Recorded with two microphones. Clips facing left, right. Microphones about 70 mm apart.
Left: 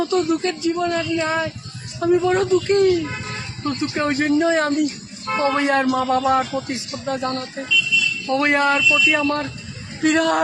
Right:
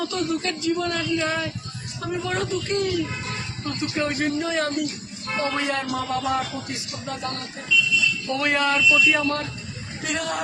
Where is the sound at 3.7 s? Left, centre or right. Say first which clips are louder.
Left 5 dB; left.